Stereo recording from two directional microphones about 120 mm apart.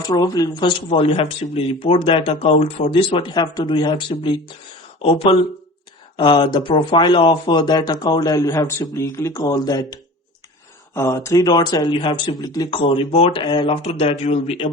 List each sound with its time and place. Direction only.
0.1 s speech: 35° left (ahead or behind)
0.9 s speech: 50° left (ahead or behind); by 12.8 s 35° left (ahead or behind)
12.8 s speech: 50° left (ahead or behind)